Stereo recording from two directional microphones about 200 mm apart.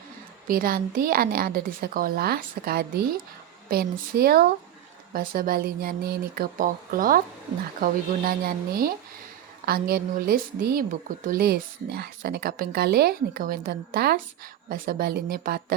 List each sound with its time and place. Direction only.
0.4 s speech: 45° right (ahead or behind)